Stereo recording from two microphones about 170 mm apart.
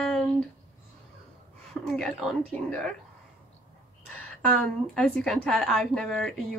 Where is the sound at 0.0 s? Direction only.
5° left (ahead or behind).